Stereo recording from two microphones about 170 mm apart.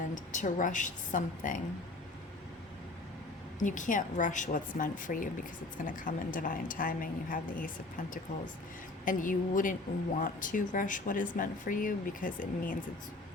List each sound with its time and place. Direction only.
0.1 s speech: 45° left (ahead or behind)
3.6 s speech: 50° left (ahead or behind)
9.0 s speech: 55° left (ahead or behind)